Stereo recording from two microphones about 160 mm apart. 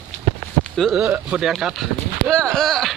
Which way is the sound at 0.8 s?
Centre (ahead or behind).